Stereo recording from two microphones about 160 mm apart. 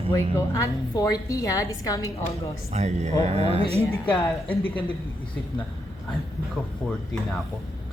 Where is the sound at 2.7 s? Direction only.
45° right (ahead or behind).